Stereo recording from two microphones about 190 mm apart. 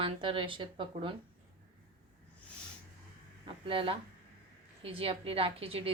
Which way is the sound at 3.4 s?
30° right (ahead or behind).